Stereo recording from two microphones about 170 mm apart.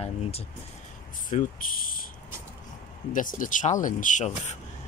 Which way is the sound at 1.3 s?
50° left (ahead or behind).